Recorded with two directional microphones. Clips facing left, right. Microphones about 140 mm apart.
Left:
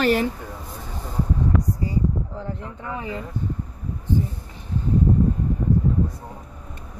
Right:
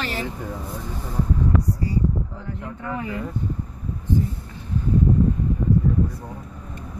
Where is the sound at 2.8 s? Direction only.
15° left (ahead or behind).